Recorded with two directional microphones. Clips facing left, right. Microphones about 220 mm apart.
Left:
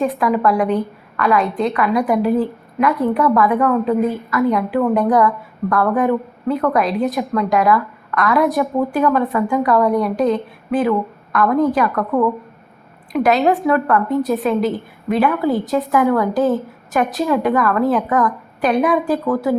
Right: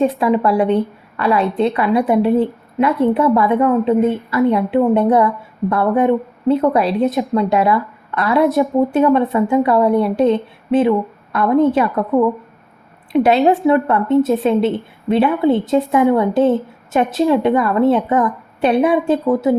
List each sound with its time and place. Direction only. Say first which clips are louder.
0.0 s a woman's voice: right 2 dB; 30° right (ahead or behind)